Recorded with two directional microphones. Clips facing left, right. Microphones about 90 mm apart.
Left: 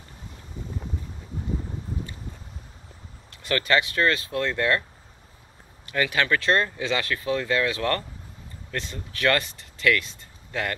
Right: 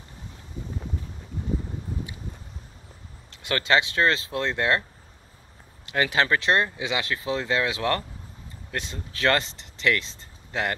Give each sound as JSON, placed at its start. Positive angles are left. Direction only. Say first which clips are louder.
{"t": 3.4, "sound": "speech", "louder": "even", "side_deg": -20}
{"t": 5.9, "sound": "speech", "louder": "right 1 dB", "side_deg": -25}